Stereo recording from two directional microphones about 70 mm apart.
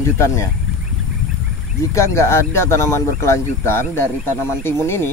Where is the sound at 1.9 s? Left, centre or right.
Left.